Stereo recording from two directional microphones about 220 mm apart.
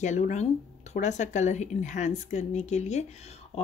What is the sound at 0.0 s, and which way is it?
Speech, 30° left (ahead or behind).